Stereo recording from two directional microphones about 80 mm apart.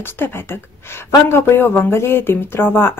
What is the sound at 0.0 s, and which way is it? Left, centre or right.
Speech, left.